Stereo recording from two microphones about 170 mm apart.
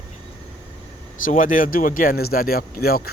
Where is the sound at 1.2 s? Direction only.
50° left (ahead or behind).